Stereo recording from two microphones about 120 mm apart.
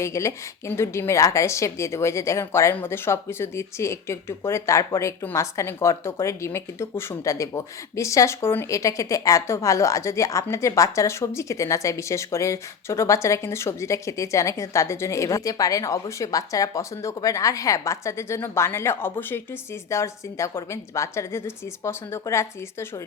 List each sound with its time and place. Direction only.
0.0 s speech: 25° left (ahead or behind)